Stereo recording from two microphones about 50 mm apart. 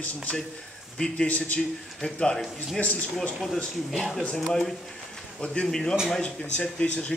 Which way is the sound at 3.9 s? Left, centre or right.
Centre.